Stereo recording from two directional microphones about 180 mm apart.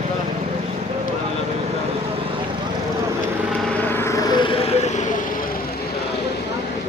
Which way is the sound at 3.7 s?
10° left (ahead or behind).